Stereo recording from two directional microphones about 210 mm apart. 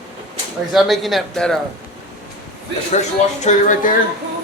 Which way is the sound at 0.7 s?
Centre (ahead or behind).